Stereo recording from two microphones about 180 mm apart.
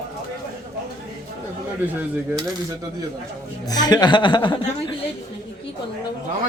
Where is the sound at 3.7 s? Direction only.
20° left (ahead or behind).